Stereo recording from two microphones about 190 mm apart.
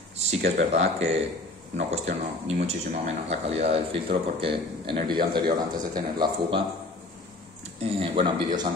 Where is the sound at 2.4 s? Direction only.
35° right (ahead or behind).